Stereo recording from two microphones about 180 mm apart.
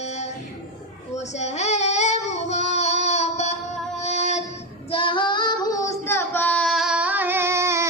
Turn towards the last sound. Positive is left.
turn(degrees=-15)  # may be behind; listen again after turning